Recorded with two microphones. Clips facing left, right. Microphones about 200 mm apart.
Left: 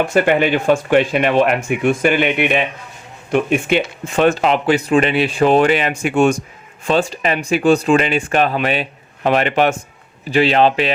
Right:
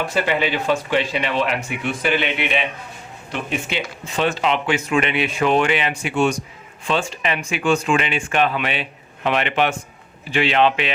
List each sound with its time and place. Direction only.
0.0 s speech: 50° left (ahead or behind)